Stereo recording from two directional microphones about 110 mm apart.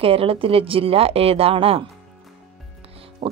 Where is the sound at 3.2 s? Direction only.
55° right (ahead or behind).